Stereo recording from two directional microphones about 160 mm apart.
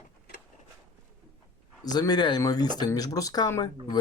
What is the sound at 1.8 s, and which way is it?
Speech, 25° left (ahead or behind).